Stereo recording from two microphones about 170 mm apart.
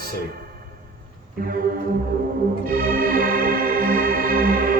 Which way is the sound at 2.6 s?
55° right (ahead or behind).